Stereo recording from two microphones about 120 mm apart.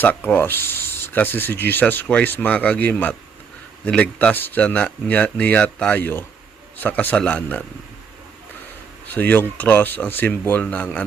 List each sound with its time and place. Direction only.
0.0 s speech: 15° left (ahead or behind)
9.1 s speech: 15° left (ahead or behind)